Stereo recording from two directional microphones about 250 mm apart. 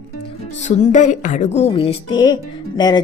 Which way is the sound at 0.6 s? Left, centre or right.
Left.